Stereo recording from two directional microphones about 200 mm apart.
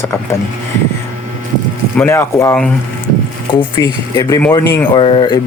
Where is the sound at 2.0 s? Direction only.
15° left (ahead or behind).